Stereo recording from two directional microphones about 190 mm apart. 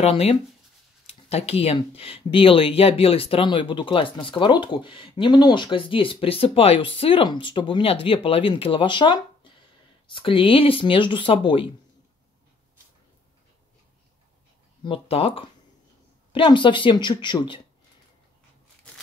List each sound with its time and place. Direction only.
0.0 s speech: 30° left (ahead or behind)
14.8 s speech: 30° left (ahead or behind)